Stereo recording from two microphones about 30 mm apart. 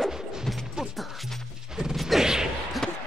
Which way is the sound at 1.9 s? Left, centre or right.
Centre.